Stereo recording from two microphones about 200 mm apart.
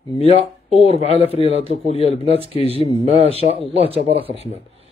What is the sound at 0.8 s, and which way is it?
Speech, 30° left (ahead or behind).